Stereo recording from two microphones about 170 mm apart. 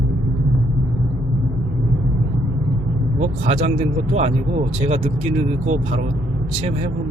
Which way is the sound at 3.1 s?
40° right (ahead or behind).